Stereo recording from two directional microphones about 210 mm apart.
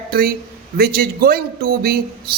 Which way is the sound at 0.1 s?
45° right (ahead or behind).